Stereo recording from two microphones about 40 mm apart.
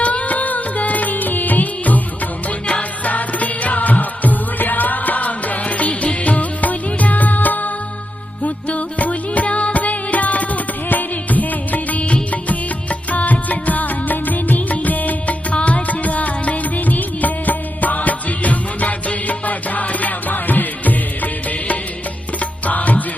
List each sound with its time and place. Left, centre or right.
0.0 s music: left
2.5 s music: left
22.4 s music: left